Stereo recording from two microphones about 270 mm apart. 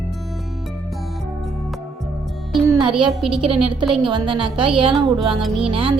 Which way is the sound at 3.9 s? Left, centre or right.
Centre.